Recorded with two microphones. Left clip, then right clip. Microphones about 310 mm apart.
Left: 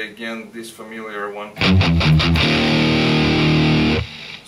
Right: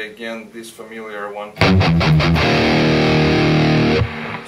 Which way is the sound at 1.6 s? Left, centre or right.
Left.